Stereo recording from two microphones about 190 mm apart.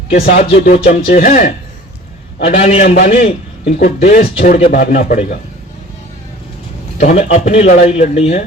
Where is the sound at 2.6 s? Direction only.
35° left (ahead or behind).